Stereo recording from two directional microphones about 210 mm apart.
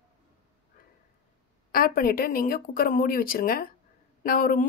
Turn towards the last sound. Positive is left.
turn(degrees=45)  # may be behind; listen again after turning